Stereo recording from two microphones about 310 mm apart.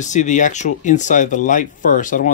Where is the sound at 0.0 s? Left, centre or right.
Left.